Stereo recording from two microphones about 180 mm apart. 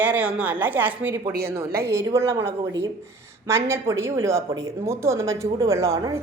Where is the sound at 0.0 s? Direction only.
10° right (ahead or behind).